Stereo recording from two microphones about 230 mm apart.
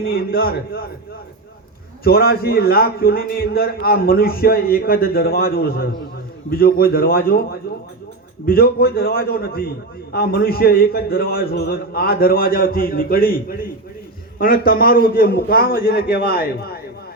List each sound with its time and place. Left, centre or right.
0.0 s a man's voice: left
2.0 s a man's voice: left